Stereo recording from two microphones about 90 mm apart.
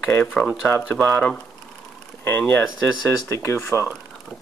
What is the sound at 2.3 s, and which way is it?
Speech, 25° left (ahead or behind).